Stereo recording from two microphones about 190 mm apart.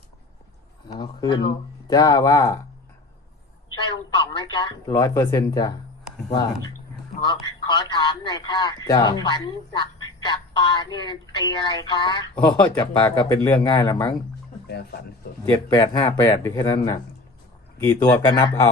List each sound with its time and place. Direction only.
0.9 s speech: 20° left (ahead or behind)
4.4 s speech: 25° left (ahead or behind)
7.3 s speech: 25° left (ahead or behind)
13.1 s speech: 10° left (ahead or behind)
14.7 s speech: 55° left (ahead or behind)
15.4 s speech: 20° left (ahead or behind)